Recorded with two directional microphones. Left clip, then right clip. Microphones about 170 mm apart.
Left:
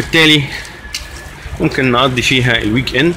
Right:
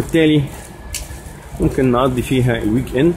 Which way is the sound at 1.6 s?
5° left (ahead or behind).